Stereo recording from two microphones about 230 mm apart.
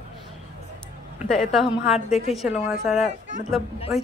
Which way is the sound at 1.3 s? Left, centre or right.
Centre.